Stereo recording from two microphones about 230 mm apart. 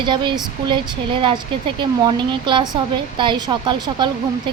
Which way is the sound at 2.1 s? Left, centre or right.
Centre.